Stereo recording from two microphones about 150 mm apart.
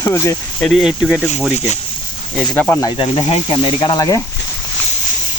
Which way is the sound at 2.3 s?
5° left (ahead or behind).